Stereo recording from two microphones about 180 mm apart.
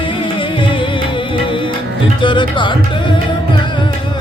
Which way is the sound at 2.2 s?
25° left (ahead or behind).